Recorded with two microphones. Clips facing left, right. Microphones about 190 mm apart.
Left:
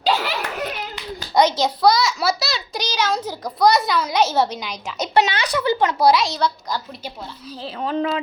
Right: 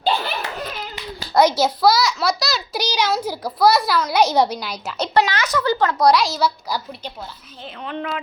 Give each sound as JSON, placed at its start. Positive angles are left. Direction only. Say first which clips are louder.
{"t": 0.0, "sound": "a sound", "louder": "left 1 dB", "side_deg": 85}
{"t": 1.3, "sound": "a child's voice", "louder": "right 1 dB", "side_deg": -10}
{"t": 2.8, "sound": "a child's voice", "louder": "right 1 dB", "side_deg": -10}
{"t": 4.1, "sound": "a child's voice", "louder": "right 3 dB", "side_deg": -15}
{"t": 5.1, "sound": "speech", "louder": "even", "side_deg": 25}
{"t": 6.1, "sound": "a child's voice", "louder": "right 2 dB", "side_deg": 0}
{"t": 7.6, "sound": "speech", "louder": "left 6 dB", "side_deg": 35}